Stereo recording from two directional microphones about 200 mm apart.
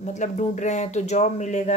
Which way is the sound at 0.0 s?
35° left (ahead or behind).